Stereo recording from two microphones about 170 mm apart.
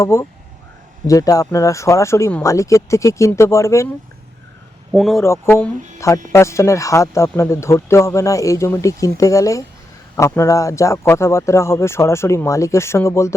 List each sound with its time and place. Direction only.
0.0 s speech: 15° left (ahead or behind)
4.9 s a man's voice: centre (ahead or behind)
5.2 s speech: 15° left (ahead or behind)